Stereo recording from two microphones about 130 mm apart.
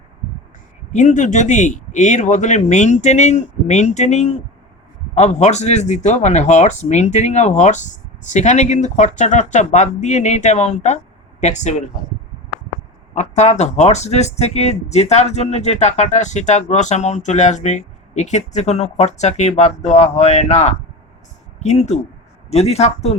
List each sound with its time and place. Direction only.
0.9 s speech: 70° left (ahead or behind)
13.1 s speech: 65° left (ahead or behind)